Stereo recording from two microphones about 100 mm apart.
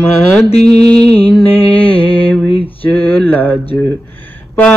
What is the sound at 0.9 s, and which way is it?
Mantra, 10° left (ahead or behind).